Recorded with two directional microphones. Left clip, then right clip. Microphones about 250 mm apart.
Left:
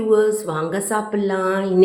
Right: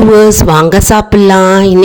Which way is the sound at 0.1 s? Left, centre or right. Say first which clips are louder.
Right 9 dB; right.